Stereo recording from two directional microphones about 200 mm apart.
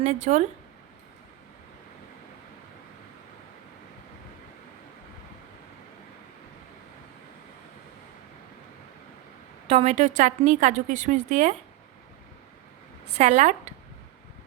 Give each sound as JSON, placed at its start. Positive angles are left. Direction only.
{"t": 0.0, "sound": "a woman's voice", "side_deg": -35}
{"t": 9.6, "sound": "a woman's voice", "side_deg": -30}
{"t": 13.1, "sound": "a woman's voice", "side_deg": -35}